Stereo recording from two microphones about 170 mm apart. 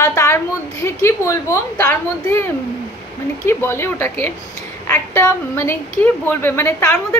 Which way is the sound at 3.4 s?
15° left (ahead or behind).